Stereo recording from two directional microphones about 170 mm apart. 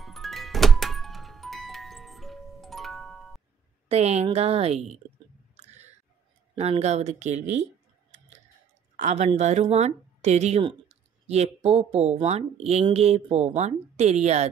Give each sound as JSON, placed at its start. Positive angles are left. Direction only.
{"t": 0.0, "sound": "music", "side_deg": 0}
{"t": 3.9, "sound": "a woman's voice", "side_deg": -40}
{"t": 5.6, "sound": "a sound", "side_deg": -40}
{"t": 6.5, "sound": "a woman's voice", "side_deg": -40}
{"t": 8.9, "sound": "a woman's voice", "side_deg": -40}